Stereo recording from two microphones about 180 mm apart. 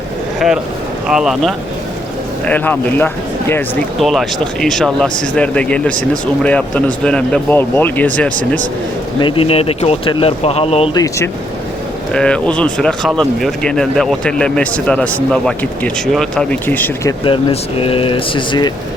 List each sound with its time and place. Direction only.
0.3 s speech: centre (ahead or behind)
9.2 s speech: 30° left (ahead or behind)
10.9 s speech: 20° left (ahead or behind)
12.1 s speech: 5° left (ahead or behind)
17.2 s speech: 30° left (ahead or behind)